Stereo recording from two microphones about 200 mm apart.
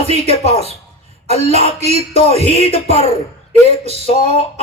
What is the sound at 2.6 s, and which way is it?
Speech, 30° left (ahead or behind).